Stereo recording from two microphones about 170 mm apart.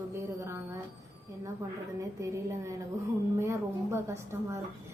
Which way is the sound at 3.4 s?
15° right (ahead or behind).